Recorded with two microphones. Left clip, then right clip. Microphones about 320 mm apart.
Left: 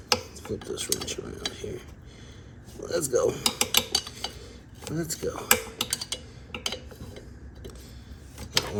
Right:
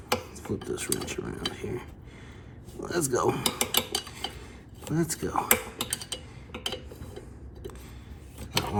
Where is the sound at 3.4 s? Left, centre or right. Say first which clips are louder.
Left 3 dB; centre.